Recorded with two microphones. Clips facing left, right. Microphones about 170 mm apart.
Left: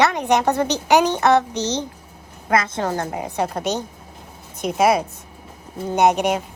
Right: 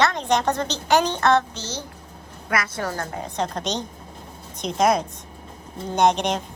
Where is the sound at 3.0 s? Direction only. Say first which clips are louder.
Left 4 dB; 15° left (ahead or behind).